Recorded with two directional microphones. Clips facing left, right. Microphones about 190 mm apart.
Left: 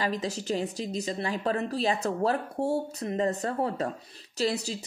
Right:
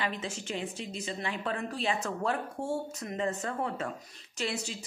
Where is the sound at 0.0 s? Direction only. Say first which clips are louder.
Left 5 dB; 40° left (ahead or behind).